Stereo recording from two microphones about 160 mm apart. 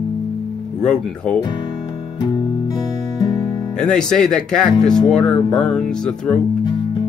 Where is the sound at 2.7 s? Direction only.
20° left (ahead or behind).